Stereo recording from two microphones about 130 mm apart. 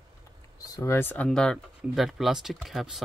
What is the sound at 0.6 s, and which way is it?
Speech, 25° left (ahead or behind).